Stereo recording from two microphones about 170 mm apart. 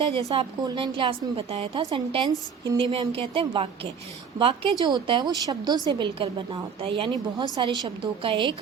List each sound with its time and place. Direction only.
0.3 s a woman's voice: 30° right (ahead or behind)